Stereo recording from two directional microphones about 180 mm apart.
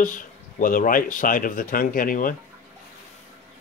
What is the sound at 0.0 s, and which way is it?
Speech, 50° left (ahead or behind).